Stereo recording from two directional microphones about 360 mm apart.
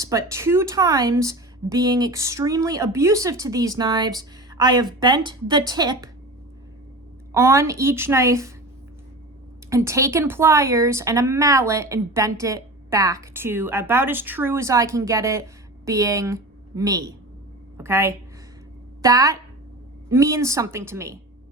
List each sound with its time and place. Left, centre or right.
0.0 s speech: centre
7.3 s speech: centre
9.6 s a woman's voice: centre